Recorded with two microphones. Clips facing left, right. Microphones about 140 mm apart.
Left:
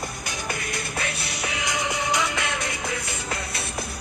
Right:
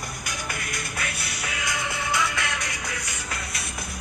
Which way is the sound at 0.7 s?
25° left (ahead or behind).